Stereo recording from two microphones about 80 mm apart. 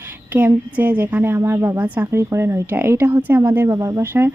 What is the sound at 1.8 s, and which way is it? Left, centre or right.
Speech, centre.